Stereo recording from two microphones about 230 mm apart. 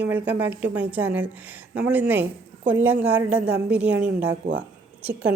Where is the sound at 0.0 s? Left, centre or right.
Centre.